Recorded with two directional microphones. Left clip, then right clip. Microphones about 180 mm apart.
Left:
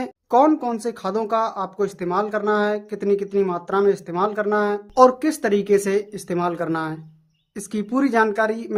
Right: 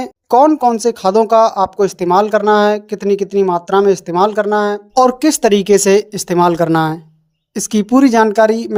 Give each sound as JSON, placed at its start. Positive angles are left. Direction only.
{"t": 0.0, "sound": "speech", "side_deg": -35}